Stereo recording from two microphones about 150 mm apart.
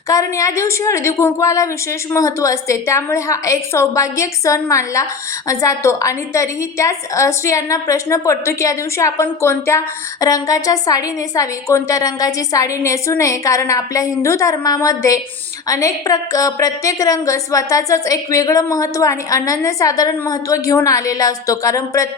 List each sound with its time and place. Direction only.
0.1 s a woman's voice: 20° left (ahead or behind)